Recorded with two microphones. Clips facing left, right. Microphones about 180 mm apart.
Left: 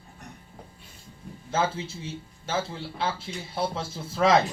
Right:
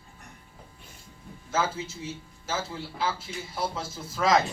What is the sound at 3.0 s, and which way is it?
A man's voice, 30° left (ahead or behind).